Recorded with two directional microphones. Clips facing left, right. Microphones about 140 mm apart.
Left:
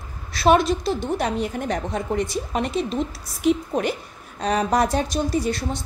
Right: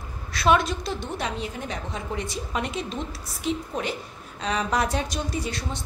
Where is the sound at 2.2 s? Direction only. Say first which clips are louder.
Left 5 dB; 40° left (ahead or behind).